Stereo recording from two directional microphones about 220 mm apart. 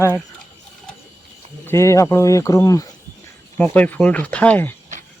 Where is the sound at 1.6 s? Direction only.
10° left (ahead or behind).